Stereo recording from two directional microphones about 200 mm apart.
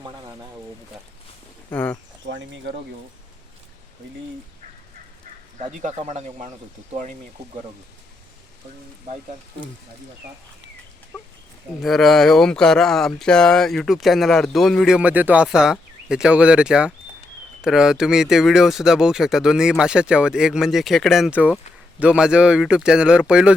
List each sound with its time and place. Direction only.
1.7 s speech: 5° left (ahead or behind)
2.2 s speech: 65° right (ahead or behind)
5.5 s speech: 35° right (ahead or behind)
11.8 s speech: centre (ahead or behind)